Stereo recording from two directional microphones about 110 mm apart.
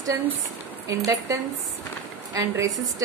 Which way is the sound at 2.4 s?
30° right (ahead or behind).